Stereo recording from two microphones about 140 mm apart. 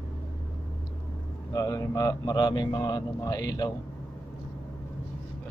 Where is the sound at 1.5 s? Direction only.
25° left (ahead or behind).